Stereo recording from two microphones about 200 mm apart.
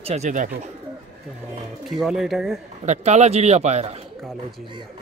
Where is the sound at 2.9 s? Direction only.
35° right (ahead or behind).